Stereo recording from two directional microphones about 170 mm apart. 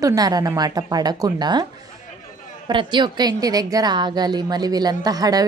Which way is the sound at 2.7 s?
30° right (ahead or behind).